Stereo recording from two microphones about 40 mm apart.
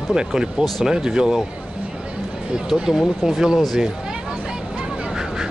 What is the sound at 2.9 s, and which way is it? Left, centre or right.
Speech, centre.